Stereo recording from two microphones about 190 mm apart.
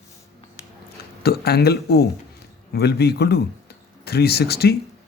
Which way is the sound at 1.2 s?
55° left (ahead or behind).